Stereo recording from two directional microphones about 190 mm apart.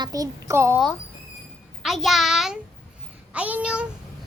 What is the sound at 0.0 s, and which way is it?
Speech, 20° right (ahead or behind).